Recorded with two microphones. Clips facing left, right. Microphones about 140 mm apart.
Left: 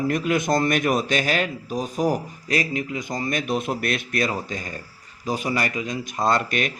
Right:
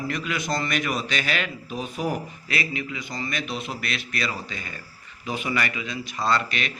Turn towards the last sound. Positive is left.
turn(degrees=50)  # may be behind; listen again after turning